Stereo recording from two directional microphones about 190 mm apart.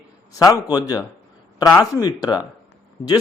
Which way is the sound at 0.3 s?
20° left (ahead or behind).